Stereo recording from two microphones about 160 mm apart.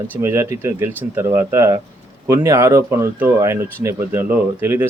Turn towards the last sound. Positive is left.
turn(degrees=-15)  # may be behind; listen again after turning